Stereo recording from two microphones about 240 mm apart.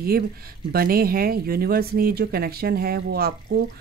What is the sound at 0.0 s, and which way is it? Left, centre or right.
A woman's voice, right.